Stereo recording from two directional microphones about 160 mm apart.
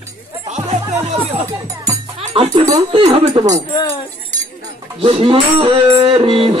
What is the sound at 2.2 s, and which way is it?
Music, 35° right (ahead or behind).